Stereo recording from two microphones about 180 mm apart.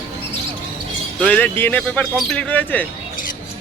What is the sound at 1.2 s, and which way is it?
Speech, 10° left (ahead or behind).